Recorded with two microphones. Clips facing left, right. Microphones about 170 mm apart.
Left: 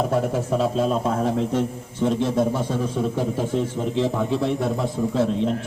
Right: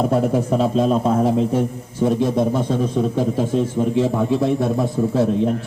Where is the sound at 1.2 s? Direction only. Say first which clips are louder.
Right 4 dB; 10° right (ahead or behind).